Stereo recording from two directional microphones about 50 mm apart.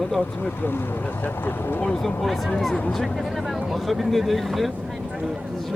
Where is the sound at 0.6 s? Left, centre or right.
Left.